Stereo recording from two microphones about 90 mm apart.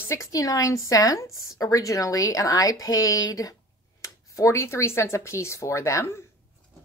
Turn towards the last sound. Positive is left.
turn(degrees=35)  # may be behind; listen again after turning